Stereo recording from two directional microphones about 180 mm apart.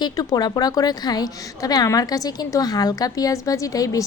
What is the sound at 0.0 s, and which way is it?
A woman's voice, 20° left (ahead or behind).